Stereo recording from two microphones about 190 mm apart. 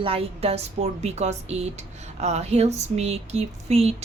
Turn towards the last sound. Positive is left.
turn(degrees=-35)  # may be behind; listen again after turning